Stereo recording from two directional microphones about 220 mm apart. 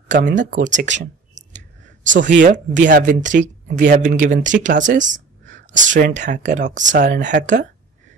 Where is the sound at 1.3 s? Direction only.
35° right (ahead or behind).